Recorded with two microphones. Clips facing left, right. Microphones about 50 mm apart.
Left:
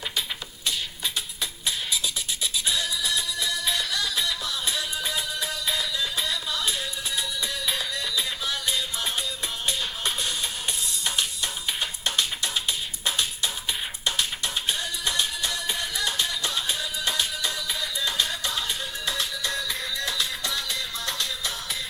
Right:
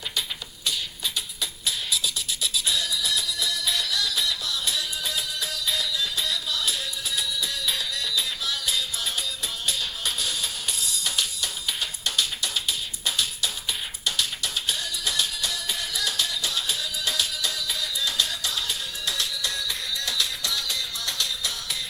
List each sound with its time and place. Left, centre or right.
0.6 s beatboxing: left
2.4 s music: centre